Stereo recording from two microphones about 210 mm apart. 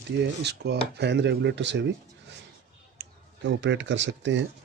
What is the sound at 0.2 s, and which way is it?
Speech, 55° right (ahead or behind).